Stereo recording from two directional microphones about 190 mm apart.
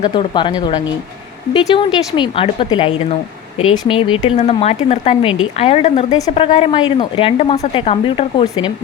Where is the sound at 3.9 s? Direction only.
30° left (ahead or behind).